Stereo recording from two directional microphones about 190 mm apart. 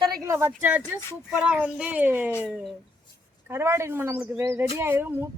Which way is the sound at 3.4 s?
15° right (ahead or behind).